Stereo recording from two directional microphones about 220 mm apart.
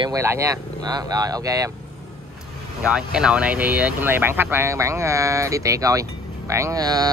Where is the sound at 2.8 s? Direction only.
5° right (ahead or behind).